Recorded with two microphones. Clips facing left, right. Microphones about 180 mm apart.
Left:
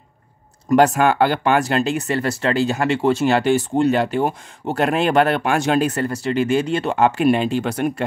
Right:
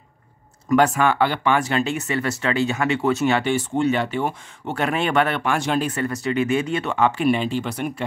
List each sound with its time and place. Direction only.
0.7 s speech: 40° left (ahead or behind)